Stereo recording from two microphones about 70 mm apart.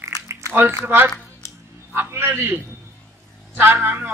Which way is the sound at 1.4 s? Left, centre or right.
Left.